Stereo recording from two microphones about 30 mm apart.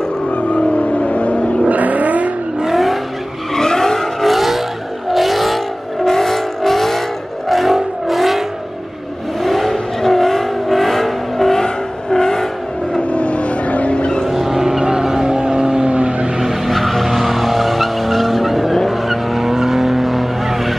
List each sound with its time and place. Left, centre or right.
0.3 s vehicle: left
1.7 s vehicle: right
2.7 s vehicle: centre
3.5 s vehicle: centre
4.3 s vehicle: centre
6.0 s vehicle: centre
13.1 s vehicle: left
14.3 s vehicle: centre
14.8 s vehicle: right
15.9 s vehicle: right
16.3 s vehicle: centre